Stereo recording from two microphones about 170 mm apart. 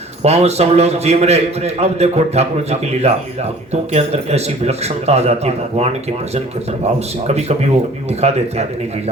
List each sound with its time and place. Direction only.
0.2 s a man's voice: 40° right (ahead or behind)